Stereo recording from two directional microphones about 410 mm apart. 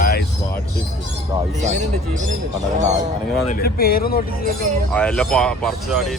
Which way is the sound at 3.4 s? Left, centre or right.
Left.